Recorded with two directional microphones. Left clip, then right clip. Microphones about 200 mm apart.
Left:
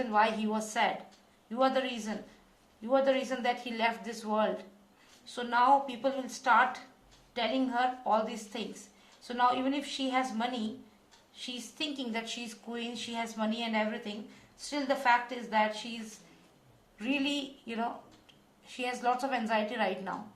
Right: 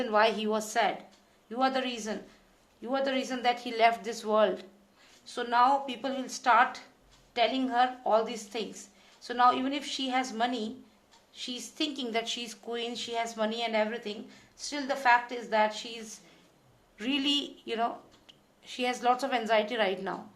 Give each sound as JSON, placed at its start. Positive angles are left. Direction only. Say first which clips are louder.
{"t": 0.0, "sound": "speech", "louder": "right 2 dB", "side_deg": -45}
{"t": 17.0, "sound": "speech", "louder": "right 3 dB", "side_deg": -45}